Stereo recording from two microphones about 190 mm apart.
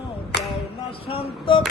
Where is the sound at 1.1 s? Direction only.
25° left (ahead or behind).